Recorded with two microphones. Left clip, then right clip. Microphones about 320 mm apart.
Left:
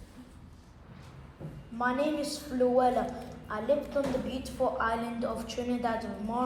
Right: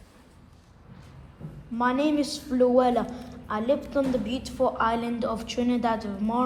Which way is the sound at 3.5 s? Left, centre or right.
Centre.